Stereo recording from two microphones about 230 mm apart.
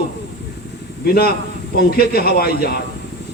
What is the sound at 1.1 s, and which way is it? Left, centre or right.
A man's voice, left.